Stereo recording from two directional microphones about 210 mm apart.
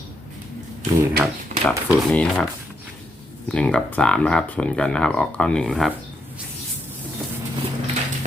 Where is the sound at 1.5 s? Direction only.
35° right (ahead or behind).